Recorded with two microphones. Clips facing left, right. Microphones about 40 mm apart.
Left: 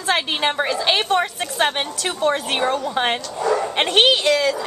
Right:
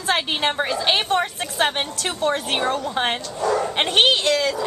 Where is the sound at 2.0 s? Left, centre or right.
Centre.